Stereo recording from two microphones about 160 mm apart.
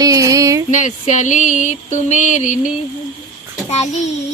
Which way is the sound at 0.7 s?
50° left (ahead or behind).